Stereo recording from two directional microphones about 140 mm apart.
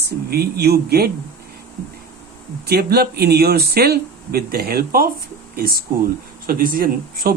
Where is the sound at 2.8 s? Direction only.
90° right.